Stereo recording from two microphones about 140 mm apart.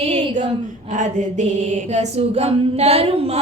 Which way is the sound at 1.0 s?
60° right (ahead or behind).